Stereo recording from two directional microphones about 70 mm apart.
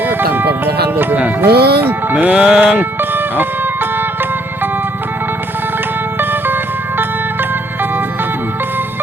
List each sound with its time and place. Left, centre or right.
0.1 s music: right
2.1 s music: centre
6.1 s music: right